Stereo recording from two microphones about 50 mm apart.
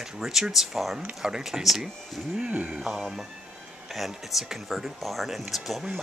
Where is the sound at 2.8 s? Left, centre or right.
Centre.